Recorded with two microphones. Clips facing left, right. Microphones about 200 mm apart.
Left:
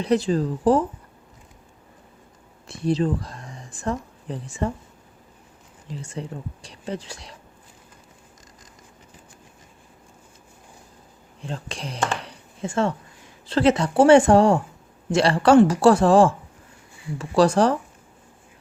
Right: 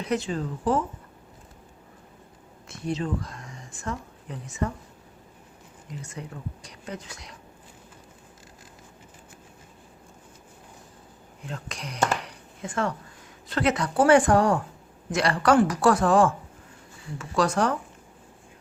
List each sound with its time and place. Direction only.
0.0 s speech: 35° left (ahead or behind)
2.6 s speech: 35° left (ahead or behind)
5.9 s speech: 30° left (ahead or behind)
11.4 s speech: 30° left (ahead or behind)
12.2 s a sound: 25° left (ahead or behind)
13.5 s speech: 30° left (ahead or behind)